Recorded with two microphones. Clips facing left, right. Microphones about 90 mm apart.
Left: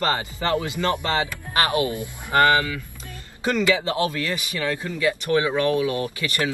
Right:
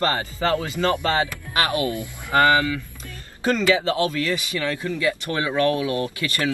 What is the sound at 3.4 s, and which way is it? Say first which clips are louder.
Speech: right 1 dB; 30° right (ahead or behind).